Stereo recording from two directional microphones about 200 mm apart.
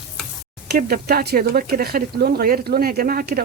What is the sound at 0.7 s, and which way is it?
A woman's voice, 50° right (ahead or behind).